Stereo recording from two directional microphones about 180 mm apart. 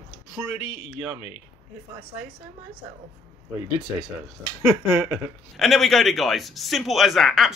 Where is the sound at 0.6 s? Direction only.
35° left (ahead or behind).